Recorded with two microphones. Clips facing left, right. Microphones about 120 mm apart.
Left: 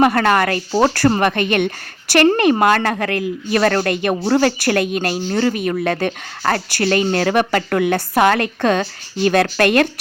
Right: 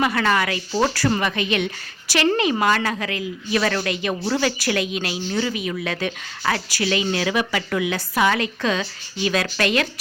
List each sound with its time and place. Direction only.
0.0 s a woman's voice: 50° left (ahead or behind)